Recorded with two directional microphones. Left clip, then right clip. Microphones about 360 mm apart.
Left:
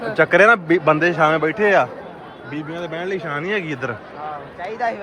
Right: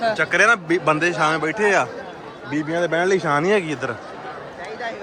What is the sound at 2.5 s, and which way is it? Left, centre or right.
A man's voice, centre.